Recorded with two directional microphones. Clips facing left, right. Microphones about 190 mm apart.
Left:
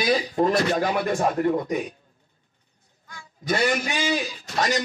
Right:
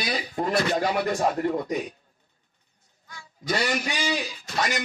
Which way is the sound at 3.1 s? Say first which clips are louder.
Left 3 dB; 50° left (ahead or behind).